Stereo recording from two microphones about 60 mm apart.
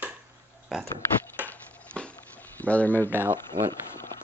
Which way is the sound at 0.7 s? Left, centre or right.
Centre.